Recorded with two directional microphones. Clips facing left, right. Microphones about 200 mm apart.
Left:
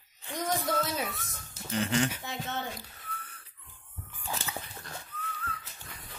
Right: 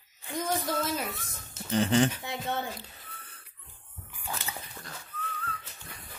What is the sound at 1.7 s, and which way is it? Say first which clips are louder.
Speech: right 5 dB; 35° right (ahead or behind).